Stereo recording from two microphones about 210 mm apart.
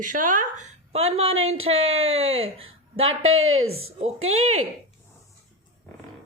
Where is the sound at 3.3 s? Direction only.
75° right (ahead or behind).